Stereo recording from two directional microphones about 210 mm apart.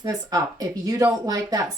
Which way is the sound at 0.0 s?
15° right (ahead or behind).